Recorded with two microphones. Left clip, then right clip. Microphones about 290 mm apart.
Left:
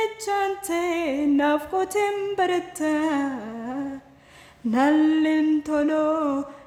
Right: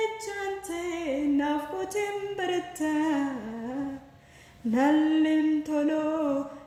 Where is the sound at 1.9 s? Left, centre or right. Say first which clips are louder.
Left 6 dB; centre.